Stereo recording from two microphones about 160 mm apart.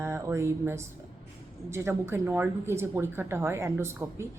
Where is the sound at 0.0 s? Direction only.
15° right (ahead or behind).